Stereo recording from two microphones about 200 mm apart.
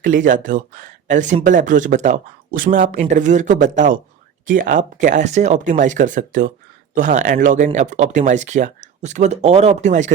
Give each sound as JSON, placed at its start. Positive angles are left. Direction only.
{"t": 0.0, "sound": "speech", "side_deg": -40}